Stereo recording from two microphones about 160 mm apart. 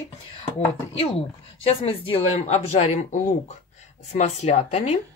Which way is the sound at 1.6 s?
35° left (ahead or behind).